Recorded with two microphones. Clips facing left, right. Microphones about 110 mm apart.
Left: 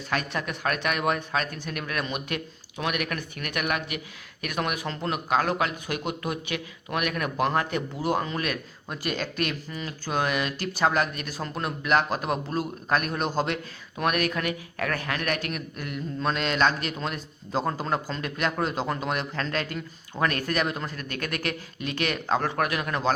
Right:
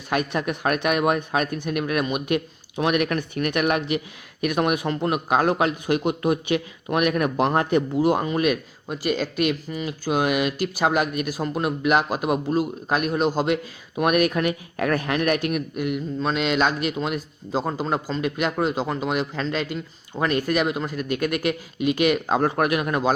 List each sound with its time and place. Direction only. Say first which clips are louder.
0.1 s speech: right 6 dB; 20° right (ahead or behind)
9.0 s speech: right 6 dB; 5° right (ahead or behind)
22.4 s speech: right 6 dB; 25° right (ahead or behind)